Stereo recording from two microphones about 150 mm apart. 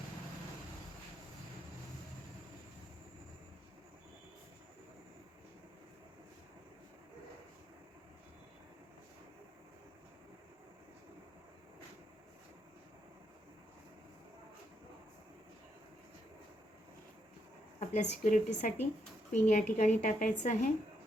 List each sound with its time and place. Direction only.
17.7 s a woman's voice: 55° left (ahead or behind)